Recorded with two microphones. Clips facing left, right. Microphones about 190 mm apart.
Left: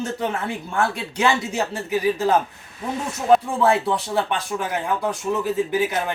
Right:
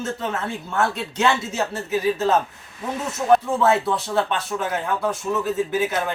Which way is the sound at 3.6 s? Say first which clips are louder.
Even; 15° left (ahead or behind).